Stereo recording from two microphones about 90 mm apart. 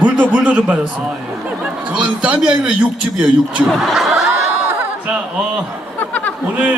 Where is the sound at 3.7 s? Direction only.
Centre (ahead or behind).